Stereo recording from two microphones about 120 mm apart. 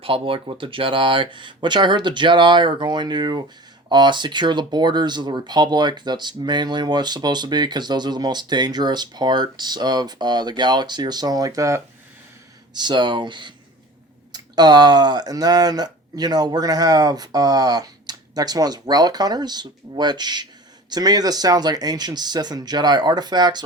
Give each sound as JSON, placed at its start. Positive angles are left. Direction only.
{"t": 0.0, "sound": "speech", "side_deg": -50}
{"t": 12.7, "sound": "speech", "side_deg": -40}